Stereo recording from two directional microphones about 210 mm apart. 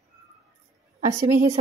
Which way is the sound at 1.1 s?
15° right (ahead or behind).